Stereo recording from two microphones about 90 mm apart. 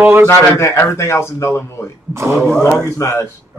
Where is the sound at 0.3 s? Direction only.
30° left (ahead or behind).